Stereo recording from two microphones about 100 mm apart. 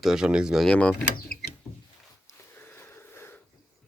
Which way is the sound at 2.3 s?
20° left (ahead or behind).